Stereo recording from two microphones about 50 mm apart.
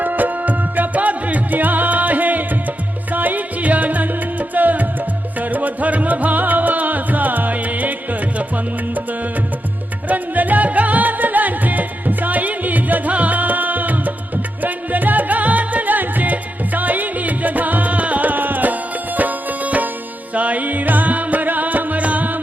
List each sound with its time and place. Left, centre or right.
0.0 s music: right
10.1 s music: right